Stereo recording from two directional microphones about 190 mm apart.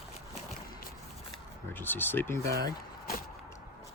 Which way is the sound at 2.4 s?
55° right (ahead or behind).